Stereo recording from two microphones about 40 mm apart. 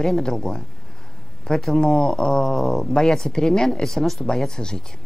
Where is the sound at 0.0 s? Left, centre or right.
Centre.